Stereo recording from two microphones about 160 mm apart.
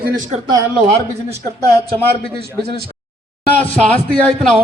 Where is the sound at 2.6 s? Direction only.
70° right (ahead or behind).